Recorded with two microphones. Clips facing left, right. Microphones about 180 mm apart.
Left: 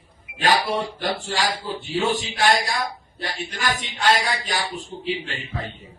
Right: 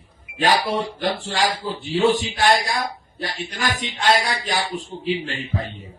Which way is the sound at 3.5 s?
45° right (ahead or behind).